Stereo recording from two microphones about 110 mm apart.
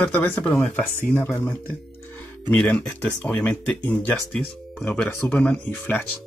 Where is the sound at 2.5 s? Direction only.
15° left (ahead or behind).